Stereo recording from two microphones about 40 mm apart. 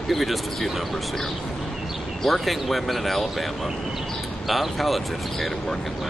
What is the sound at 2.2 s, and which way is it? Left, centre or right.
Speech, centre.